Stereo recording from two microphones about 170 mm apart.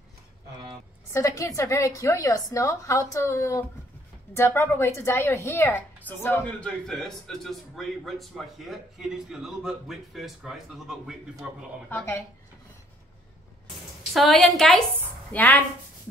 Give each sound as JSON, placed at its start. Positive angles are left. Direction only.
{"t": 1.1, "sound": "a woman's voice", "side_deg": 20}
{"t": 14.1, "sound": "a woman's voice", "side_deg": 0}